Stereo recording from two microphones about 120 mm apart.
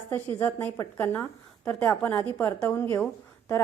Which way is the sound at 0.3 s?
15° left (ahead or behind).